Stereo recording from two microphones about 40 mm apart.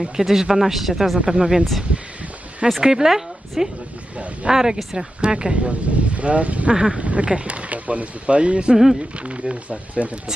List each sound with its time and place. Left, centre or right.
0.0 s speech: centre
1.2 s speech: centre
1.6 s speech: centre; by 6.7 s right
6.7 s speech: centre
7.0 s speech: right